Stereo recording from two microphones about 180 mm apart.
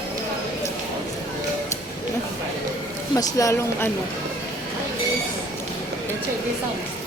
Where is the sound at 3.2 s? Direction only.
20° left (ahead or behind).